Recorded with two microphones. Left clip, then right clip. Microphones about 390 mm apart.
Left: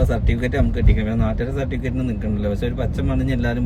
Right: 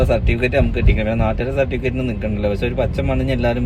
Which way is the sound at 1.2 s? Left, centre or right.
Centre.